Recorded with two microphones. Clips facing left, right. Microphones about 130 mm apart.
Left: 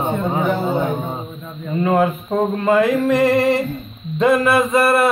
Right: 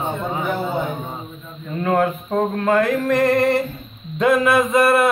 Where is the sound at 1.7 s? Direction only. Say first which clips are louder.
Left 2 dB; 5° left (ahead or behind).